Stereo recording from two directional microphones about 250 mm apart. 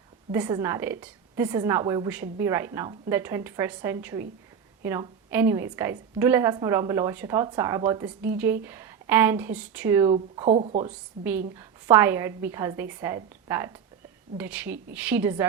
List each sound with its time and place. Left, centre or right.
0.3 s a woman's voice: centre
10.1 s speech: right
11.2 s a woman's voice: centre